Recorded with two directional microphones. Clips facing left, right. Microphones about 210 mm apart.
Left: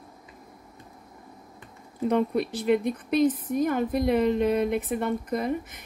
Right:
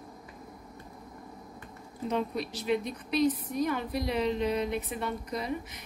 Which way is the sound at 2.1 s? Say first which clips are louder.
Left 7 dB; 55° left (ahead or behind).